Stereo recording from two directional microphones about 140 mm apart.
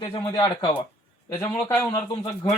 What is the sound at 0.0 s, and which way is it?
Speech, 30° left (ahead or behind).